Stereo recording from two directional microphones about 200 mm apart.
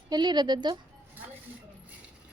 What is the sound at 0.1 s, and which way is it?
Speech, 20° right (ahead or behind).